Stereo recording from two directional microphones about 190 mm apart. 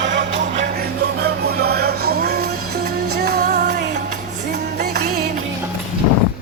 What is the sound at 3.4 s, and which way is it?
Music, 40° right (ahead or behind).